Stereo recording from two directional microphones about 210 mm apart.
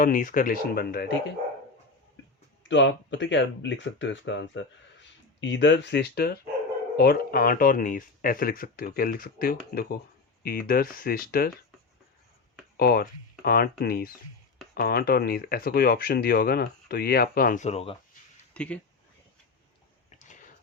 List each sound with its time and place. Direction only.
0.0 s speech: 40° left (ahead or behind)
2.6 s speech: 60° left (ahead or behind)
12.7 s speech: 50° left (ahead or behind); by 17.9 s 30° left (ahead or behind)
18.5 s speech: 5° left (ahead or behind)
20.1 s a sound: 35° left (ahead or behind)